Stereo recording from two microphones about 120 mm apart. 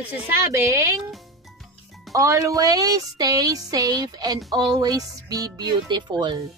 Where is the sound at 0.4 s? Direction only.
25° right (ahead or behind).